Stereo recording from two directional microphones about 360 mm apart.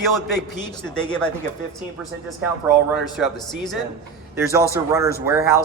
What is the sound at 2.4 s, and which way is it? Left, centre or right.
Speech, centre.